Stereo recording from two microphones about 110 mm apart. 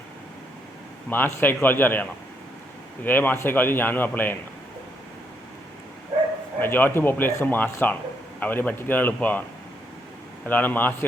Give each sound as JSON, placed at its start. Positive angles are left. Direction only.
{"t": 1.1, "sound": "a man's voice", "side_deg": 15}
{"t": 6.6, "sound": "a man's voice", "side_deg": 15}
{"t": 10.4, "sound": "a man's voice", "side_deg": 15}